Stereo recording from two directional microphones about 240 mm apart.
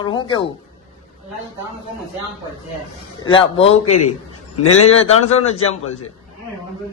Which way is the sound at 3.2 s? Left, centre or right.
Left.